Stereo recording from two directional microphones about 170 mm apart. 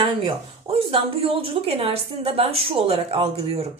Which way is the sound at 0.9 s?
35° right (ahead or behind).